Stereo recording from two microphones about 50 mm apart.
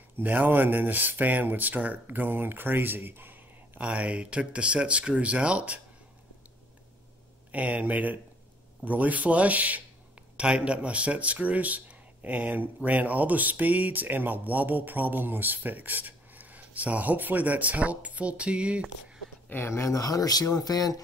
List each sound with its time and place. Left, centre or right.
0.2 s speech: right
3.8 s speech: right
7.5 s speech: right
10.3 s speech: right
19.5 s speech: left